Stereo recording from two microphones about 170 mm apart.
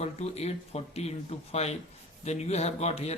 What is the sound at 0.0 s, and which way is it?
Speech, 40° left (ahead or behind).